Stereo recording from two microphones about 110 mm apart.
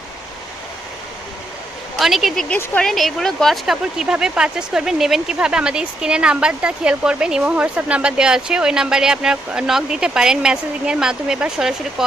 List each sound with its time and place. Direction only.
2.0 s speech: centre (ahead or behind)